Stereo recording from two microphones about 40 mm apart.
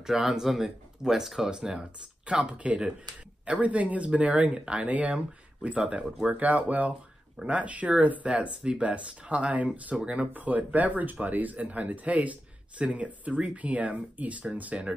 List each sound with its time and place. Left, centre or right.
0.0 s speech: centre
1.5 s speech: centre; by 14.8 s right